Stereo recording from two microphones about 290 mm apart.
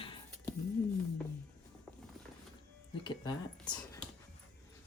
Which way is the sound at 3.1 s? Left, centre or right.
Centre.